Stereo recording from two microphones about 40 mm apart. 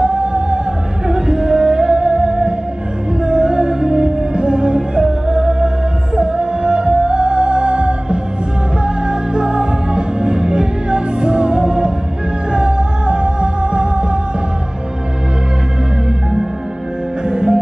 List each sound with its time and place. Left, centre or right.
0.0 s music: right
17.3 s music: right